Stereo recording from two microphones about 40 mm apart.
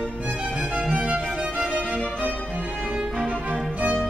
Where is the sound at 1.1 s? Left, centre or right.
Centre.